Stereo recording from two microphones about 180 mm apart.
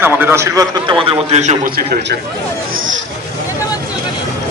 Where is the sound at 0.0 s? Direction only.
10° right (ahead or behind); by 1.7 s 40° right (ahead or behind).